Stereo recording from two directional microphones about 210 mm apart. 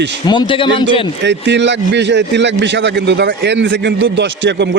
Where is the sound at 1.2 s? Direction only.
55° right (ahead or behind).